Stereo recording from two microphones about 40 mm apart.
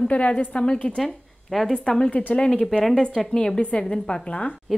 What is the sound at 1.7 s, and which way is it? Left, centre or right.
Speech, centre.